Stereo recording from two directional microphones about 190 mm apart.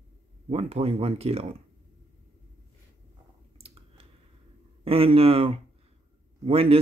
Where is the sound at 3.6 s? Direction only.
30° right (ahead or behind).